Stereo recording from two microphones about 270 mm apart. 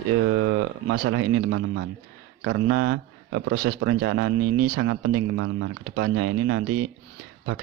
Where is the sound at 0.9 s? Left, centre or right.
Right.